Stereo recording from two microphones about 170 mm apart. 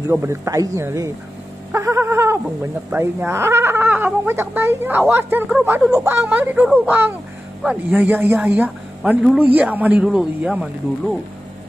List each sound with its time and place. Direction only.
0.1 s speech: 15° right (ahead or behind)
1.7 s cat: 15° right (ahead or behind)
2.9 s speech: 10° right (ahead or behind)